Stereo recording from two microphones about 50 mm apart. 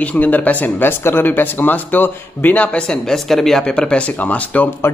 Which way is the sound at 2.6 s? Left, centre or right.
Left.